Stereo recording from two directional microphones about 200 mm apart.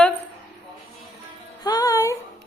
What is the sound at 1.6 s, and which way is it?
Speech, 20° left (ahead or behind).